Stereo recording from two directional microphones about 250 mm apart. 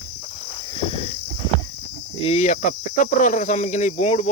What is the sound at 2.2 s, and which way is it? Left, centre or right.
Cricket, left.